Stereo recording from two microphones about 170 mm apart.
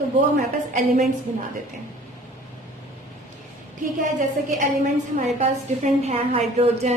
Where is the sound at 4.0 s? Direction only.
50° right (ahead or behind).